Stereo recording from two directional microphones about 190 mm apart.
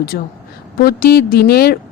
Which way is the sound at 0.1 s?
55° left (ahead or behind).